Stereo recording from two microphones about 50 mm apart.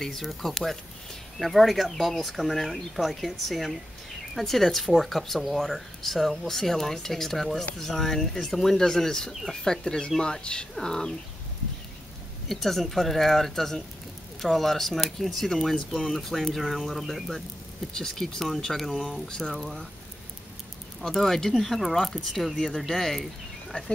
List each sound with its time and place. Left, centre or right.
0.0 s speech: centre
12.4 s speech: centre
17.9 s speech: centre
18.9 s speech: centre
19.2 s speech: centre
21.0 s speech: centre